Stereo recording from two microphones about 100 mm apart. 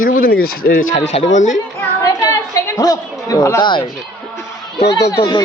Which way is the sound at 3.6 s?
55° left (ahead or behind).